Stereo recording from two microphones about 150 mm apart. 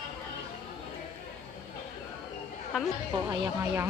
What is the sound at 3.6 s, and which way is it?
Speech, 15° right (ahead or behind).